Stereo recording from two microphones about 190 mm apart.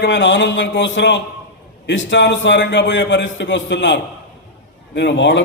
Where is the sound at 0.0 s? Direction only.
70° left (ahead or behind).